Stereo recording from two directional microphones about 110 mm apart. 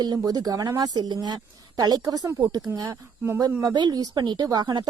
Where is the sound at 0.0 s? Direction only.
35° right (ahead or behind).